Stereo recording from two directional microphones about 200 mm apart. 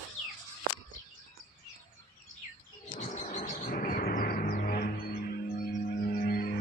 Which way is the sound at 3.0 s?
40° left (ahead or behind).